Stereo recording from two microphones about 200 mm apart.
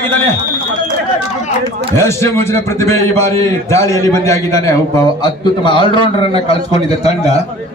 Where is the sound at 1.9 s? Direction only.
15° left (ahead or behind); by 7.4 s 30° left (ahead or behind).